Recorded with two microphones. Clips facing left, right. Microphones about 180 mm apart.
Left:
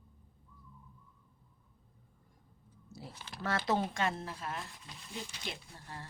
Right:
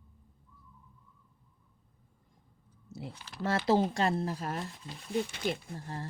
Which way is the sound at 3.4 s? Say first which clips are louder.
Right 6 dB; 30° right (ahead or behind).